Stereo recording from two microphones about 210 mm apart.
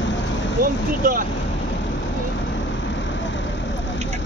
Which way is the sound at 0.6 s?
40° right (ahead or behind).